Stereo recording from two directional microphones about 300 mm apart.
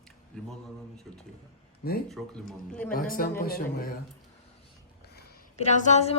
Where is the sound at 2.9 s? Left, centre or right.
Left.